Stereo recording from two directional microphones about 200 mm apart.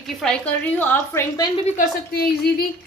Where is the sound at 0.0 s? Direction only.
5° left (ahead or behind).